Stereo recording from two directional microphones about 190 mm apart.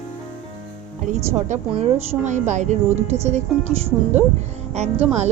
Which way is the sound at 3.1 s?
15° right (ahead or behind).